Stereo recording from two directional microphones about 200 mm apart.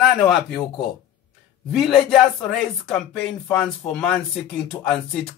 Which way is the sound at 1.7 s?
Centre (ahead or behind).